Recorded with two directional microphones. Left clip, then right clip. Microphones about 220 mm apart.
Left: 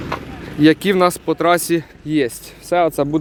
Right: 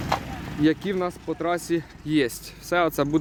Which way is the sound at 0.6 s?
30° left (ahead or behind).